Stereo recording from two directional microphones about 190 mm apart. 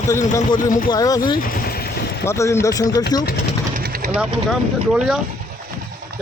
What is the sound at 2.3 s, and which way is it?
Speech, 15° left (ahead or behind).